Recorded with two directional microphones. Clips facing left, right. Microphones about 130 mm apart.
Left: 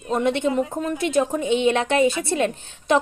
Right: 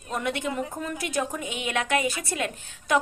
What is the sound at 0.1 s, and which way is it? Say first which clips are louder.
A woman's voice: left 8 dB; 25° left (ahead or behind).